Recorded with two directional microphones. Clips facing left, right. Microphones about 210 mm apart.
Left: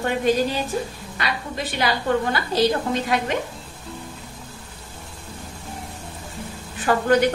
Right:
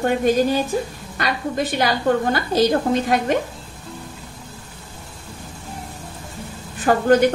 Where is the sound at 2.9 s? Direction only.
45° right (ahead or behind).